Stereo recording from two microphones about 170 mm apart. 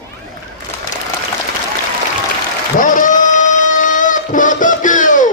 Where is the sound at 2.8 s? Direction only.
50° left (ahead or behind).